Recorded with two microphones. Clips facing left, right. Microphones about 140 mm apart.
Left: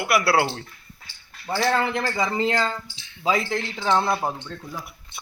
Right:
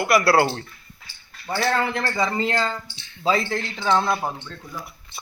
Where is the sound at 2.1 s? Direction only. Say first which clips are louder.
Right 1 dB; 20° left (ahead or behind).